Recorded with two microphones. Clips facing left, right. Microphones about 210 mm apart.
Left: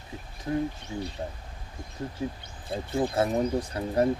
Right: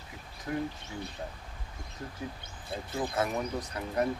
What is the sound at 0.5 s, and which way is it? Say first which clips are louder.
Speech: left 5 dB; 25° left (ahead or behind).